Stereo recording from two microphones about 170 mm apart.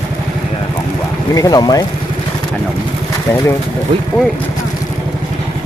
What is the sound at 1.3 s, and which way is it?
Speech, 20° left (ahead or behind).